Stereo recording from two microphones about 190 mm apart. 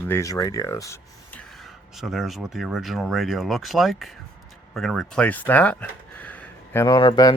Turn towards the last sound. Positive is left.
turn(degrees=20)  # may be behind; listen again after turning